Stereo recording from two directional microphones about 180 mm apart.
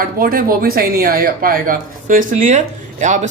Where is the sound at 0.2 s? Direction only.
55° right (ahead or behind).